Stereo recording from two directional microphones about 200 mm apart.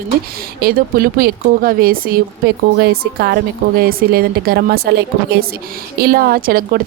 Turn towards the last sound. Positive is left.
turn(degrees=-45)  # may be behind; listen again after turning